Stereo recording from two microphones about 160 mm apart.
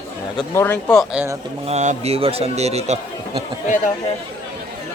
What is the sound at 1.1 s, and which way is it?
Speech, 15° right (ahead or behind).